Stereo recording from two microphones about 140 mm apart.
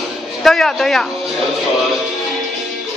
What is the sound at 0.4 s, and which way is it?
Speech, centre (ahead or behind).